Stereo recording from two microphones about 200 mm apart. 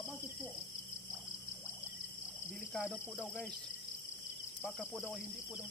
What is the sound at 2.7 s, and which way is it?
Cricket, centre (ahead or behind).